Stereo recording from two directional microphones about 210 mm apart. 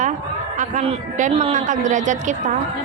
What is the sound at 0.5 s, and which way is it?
A woman's voice, 35° right (ahead or behind).